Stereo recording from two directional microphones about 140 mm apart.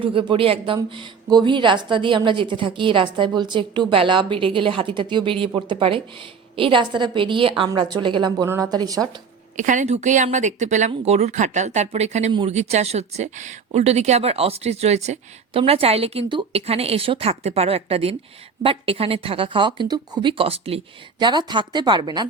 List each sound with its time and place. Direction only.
0.0 s a woman's voice: 40° right (ahead or behind)
9.6 s a woman's voice: 65° right (ahead or behind); by 22.3 s 30° right (ahead or behind)